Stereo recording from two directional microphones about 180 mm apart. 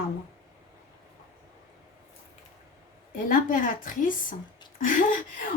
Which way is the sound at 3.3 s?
50° left (ahead or behind).